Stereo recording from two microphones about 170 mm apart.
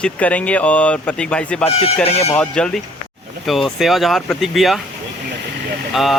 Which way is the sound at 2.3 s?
5° left (ahead or behind).